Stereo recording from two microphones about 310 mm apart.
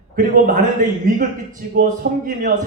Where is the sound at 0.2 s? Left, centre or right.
Right.